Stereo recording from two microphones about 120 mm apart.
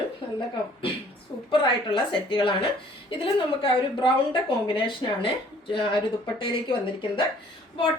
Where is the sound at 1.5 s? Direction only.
45° left (ahead or behind).